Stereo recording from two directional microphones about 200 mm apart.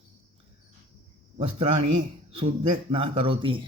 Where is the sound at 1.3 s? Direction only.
30° right (ahead or behind).